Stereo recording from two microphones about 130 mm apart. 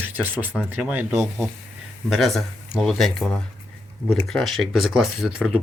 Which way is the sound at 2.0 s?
Centre (ahead or behind).